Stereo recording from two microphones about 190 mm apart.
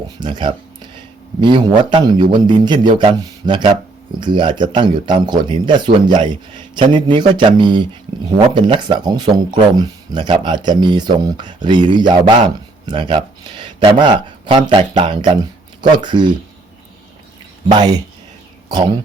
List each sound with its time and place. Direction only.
0.2 s speech: 25° right (ahead or behind)
17.7 s speech: 20° right (ahead or behind)